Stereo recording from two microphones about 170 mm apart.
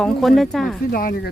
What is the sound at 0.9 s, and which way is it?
Speech, 60° left (ahead or behind).